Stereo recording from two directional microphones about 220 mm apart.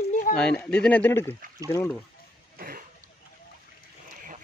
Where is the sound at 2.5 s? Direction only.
40° right (ahead or behind).